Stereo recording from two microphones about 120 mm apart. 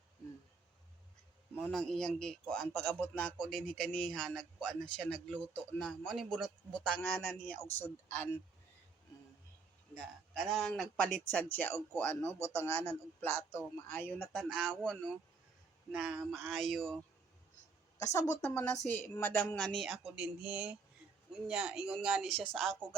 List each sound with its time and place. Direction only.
1.6 s a man's voice: 5° left (ahead or behind)
9.9 s a man's voice: 5° left (ahead or behind); by 14.3 s 20° left (ahead or behind)
14.3 s a man's voice: 5° left (ahead or behind)
15.9 s a man's voice: 5° right (ahead or behind)
18.0 s speech: 30° left (ahead or behind)
18.5 s a man's voice: 10° left (ahead or behind)
19.5 s a man's voice: 5° left (ahead or behind)